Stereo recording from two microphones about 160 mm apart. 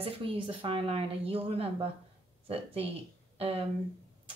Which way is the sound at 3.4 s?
40° right (ahead or behind).